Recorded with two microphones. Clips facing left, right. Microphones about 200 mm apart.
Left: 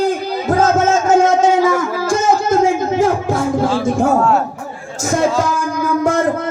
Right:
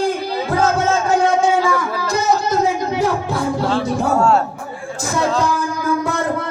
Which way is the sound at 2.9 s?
45° left (ahead or behind).